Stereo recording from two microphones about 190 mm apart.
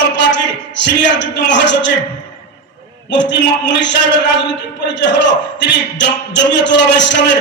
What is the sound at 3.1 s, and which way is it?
Speech, 70° left (ahead or behind).